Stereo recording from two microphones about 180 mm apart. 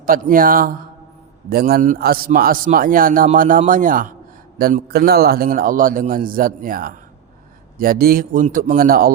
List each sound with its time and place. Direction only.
0.0 s a man's voice: 50° right (ahead or behind)